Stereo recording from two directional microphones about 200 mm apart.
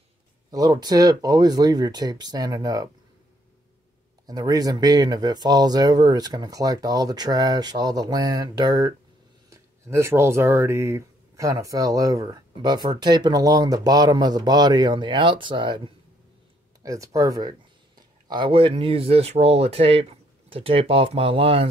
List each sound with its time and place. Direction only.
0.5 s speech: 20° right (ahead or behind)
4.3 s speech: 20° right (ahead or behind)